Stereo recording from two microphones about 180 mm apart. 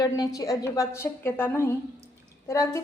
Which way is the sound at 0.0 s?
20° left (ahead or behind).